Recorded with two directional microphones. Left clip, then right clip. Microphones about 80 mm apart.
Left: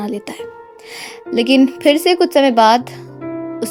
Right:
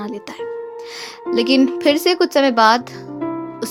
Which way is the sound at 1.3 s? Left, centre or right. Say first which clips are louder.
Left 2 dB; left.